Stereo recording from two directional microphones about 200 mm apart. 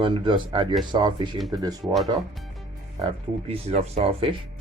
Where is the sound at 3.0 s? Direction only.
30° right (ahead or behind).